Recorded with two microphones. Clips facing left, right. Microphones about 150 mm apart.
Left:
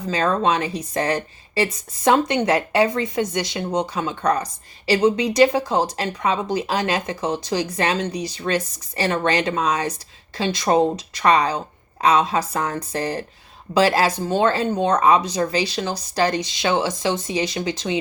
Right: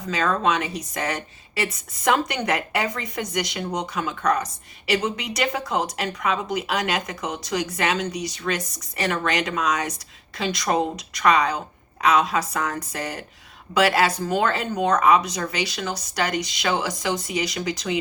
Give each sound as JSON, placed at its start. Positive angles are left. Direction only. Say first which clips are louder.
{"t": 0.1, "sound": "a woman's voice", "louder": "left 2 dB", "side_deg": 30}